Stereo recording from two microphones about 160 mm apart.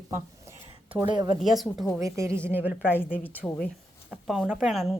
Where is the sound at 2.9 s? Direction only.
10° left (ahead or behind).